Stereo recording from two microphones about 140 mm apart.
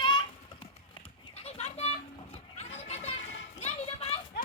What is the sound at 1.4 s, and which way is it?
Children playing, 50° left (ahead or behind).